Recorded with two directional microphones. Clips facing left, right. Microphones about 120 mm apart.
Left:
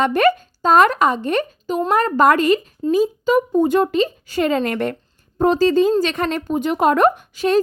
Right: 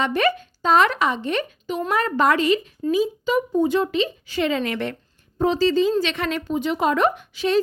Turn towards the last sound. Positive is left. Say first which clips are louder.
# left 4 dB
turn(degrees=45)  # may be behind; listen again after turning